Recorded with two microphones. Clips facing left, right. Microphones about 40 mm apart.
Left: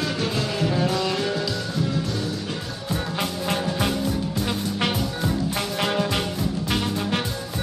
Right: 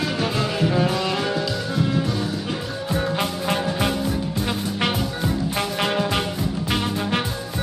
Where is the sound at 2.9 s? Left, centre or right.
Centre.